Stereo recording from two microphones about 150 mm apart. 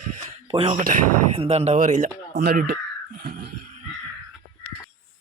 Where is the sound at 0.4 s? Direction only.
40° right (ahead or behind); by 2.7 s 85° right.